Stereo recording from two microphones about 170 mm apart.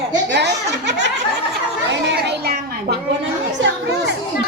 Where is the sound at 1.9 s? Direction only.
85° right.